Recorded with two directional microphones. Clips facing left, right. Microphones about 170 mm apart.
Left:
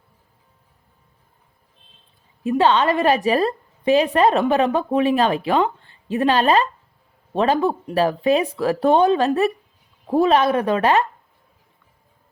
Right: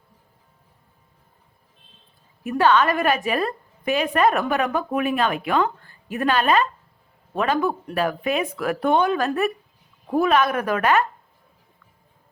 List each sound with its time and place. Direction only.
2.4 s a woman's voice: 25° left (ahead or behind)